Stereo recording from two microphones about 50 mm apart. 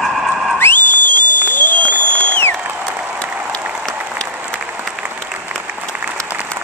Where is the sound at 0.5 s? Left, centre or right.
Left.